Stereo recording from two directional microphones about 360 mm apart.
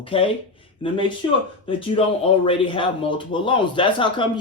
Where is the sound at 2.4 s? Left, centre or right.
Centre.